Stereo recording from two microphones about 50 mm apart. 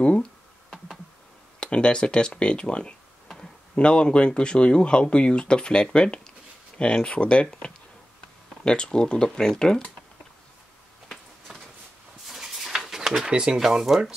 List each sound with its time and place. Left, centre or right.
0.2 s computer keyboard: centre
1.6 s speech: centre
11.1 s a sound: centre
13.3 s speech: centre